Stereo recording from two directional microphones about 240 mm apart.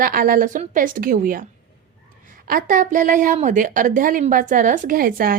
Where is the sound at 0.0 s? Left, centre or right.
Right.